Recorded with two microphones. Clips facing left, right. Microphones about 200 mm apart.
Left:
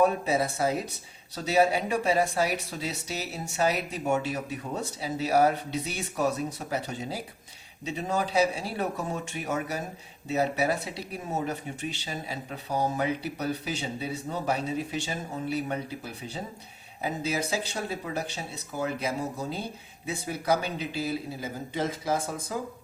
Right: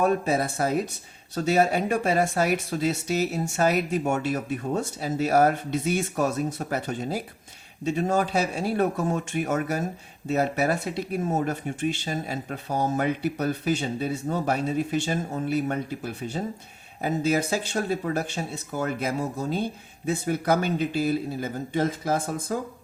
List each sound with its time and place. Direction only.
0.0 s speech: 50° right (ahead or behind)